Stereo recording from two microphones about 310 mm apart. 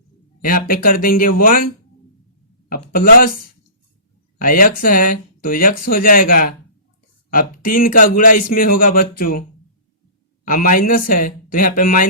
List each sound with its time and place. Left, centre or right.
0.4 s speech: left
4.4 s speech: left
10.4 s speech: left